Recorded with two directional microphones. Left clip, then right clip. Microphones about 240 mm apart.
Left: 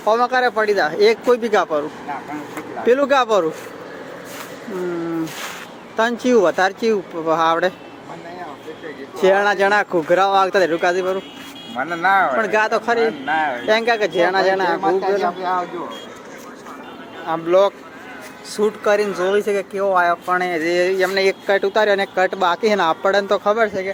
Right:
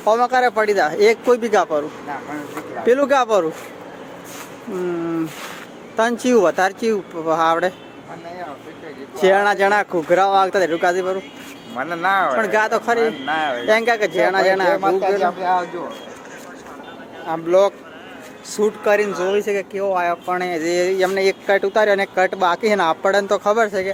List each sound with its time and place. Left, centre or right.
0.0 s speech: centre
2.8 s speech: centre
6.0 s speech: centre
9.2 s speech: centre
14.8 s speech: right
17.2 s speech: centre